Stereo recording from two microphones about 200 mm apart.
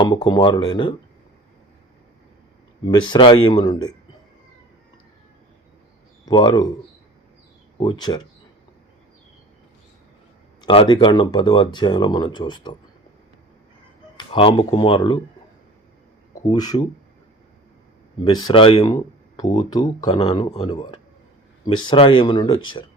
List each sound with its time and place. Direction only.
0.0 s speech: 20° left (ahead or behind)
2.8 s speech: 25° left (ahead or behind)
6.2 s speech: 20° left (ahead or behind)
7.8 s speech: 20° left (ahead or behind)
10.6 s speech: 25° left (ahead or behind)
14.2 s speech: 25° left (ahead or behind)
16.5 s speech: 20° left (ahead or behind)
18.3 s speech: 20° left (ahead or behind)